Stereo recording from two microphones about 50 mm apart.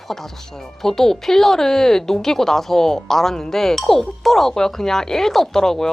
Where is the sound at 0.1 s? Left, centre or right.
Centre.